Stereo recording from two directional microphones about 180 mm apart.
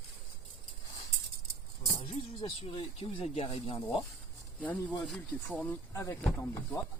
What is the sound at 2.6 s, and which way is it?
Speech, 30° left (ahead or behind).